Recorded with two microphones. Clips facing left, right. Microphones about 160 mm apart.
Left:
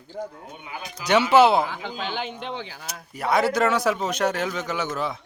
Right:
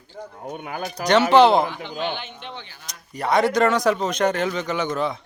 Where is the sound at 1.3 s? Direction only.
10° left (ahead or behind).